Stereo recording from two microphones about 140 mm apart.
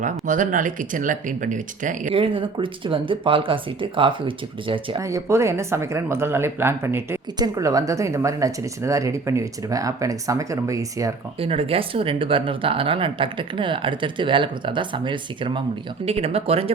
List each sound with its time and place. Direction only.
0.0 s speech: 65° right (ahead or behind)
2.1 s speech: 40° right (ahead or behind)
4.9 s speech: 20° right (ahead or behind)
7.3 s speech: 30° right (ahead or behind)
11.3 s speech: 40° right (ahead or behind)